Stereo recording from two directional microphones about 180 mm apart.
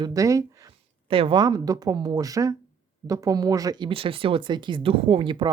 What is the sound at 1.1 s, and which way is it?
Speech, 30° right (ahead or behind).